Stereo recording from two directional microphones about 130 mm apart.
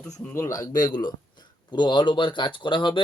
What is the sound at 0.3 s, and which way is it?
A man's voice, 25° left (ahead or behind).